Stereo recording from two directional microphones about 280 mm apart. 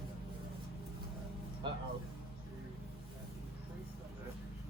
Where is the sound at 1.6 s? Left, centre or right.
Centre.